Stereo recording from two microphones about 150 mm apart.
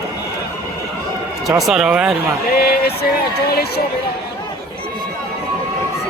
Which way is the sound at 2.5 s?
90° left.